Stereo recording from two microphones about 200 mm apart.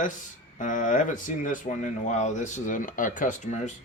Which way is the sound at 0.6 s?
40° left (ahead or behind).